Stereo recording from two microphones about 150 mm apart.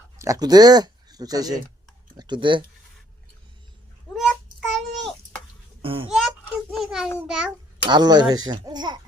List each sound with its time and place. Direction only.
0.2 s speech: 25° right (ahead or behind)
4.3 s child singing: 5° left (ahead or behind)
5.8 s a sound: 35° right (ahead or behind)
6.1 s a sound: centre (ahead or behind)
7.3 s a child's voice: 5° right (ahead or behind)
7.9 s a child's voice: 30° right (ahead or behind)